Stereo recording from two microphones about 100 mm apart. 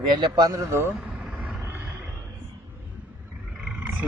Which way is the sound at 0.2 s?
45° right (ahead or behind).